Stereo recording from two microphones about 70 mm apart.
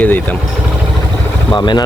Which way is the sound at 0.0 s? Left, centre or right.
Left.